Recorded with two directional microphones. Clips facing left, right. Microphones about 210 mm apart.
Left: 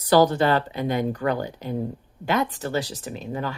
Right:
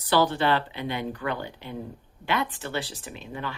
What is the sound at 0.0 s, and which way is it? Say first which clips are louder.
Speech: left 5 dB; 40° left (ahead or behind).